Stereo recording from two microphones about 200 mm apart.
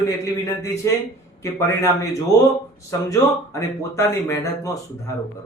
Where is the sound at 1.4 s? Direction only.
15° left (ahead or behind).